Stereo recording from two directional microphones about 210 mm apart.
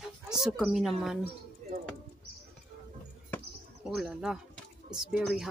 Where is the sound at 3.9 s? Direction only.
Centre (ahead or behind).